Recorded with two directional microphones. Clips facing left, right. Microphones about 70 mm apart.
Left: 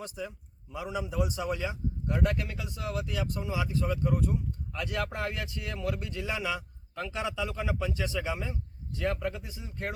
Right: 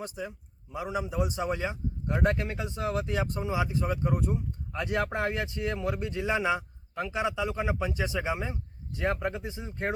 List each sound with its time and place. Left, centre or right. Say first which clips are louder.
0.0 s speech: right 2 dB; right